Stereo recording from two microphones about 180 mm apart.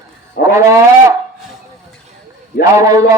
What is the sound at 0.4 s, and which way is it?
Cat, 70° left (ahead or behind).